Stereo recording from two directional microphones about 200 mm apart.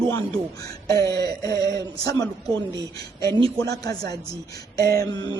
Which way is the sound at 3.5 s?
20° left (ahead or behind).